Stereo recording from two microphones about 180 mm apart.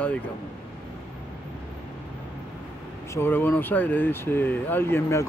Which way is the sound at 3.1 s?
10° left (ahead or behind).